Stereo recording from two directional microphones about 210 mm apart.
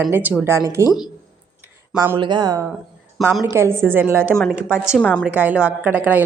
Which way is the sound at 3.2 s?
5° right (ahead or behind).